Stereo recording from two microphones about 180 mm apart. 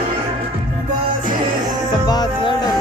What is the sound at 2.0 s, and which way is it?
Music, 20° left (ahead or behind).